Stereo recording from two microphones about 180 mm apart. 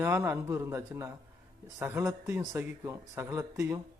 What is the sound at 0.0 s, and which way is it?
A man's voice, 15° right (ahead or behind).